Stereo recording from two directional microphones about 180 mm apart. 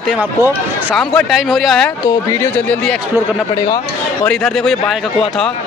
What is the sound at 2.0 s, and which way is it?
Speech, 10° left (ahead or behind).